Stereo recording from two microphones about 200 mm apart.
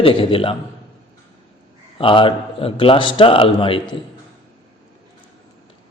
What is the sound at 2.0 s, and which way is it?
Speech, 25° left (ahead or behind).